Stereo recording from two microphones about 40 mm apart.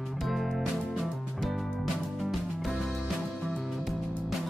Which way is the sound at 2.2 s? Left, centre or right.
Centre.